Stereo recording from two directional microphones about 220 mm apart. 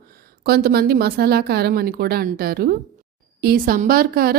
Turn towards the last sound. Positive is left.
turn(degrees=-45)  # may be behind; listen again after turning